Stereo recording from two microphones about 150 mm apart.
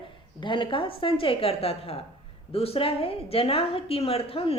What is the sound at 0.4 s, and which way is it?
A woman's voice, 35° left (ahead or behind).